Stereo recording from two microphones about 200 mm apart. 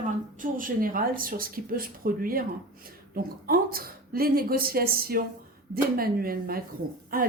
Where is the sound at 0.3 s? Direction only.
45° right (ahead or behind).